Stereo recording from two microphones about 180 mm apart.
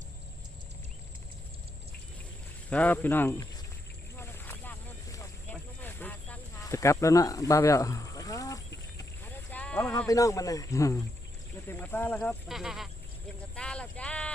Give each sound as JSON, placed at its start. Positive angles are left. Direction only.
{"t": 2.6, "sound": "speech", "side_deg": 10}
{"t": 4.2, "sound": "boat", "side_deg": 10}
{"t": 6.7, "sound": "speech", "side_deg": 15}
{"t": 9.0, "sound": "a sound", "side_deg": 10}
{"t": 10.1, "sound": "speech", "side_deg": 20}
{"t": 13.6, "sound": "a sound", "side_deg": 5}